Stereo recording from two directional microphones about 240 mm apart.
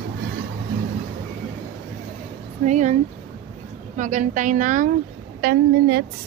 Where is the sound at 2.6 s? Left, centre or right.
Right.